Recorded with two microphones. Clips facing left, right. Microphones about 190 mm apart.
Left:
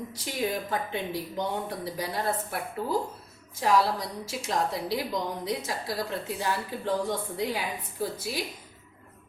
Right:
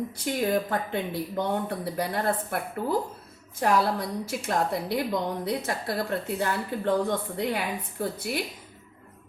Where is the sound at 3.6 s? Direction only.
55° right (ahead or behind).